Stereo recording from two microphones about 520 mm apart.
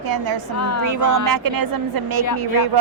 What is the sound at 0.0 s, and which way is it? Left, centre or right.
Speech, right.